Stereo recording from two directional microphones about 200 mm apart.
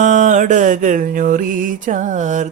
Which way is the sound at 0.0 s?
40° right (ahead or behind).